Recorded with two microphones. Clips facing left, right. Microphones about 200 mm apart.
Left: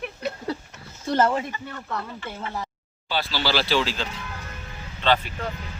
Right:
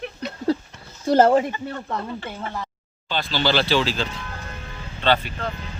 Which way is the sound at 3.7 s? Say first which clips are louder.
Right 2 dB; 30° right (ahead or behind).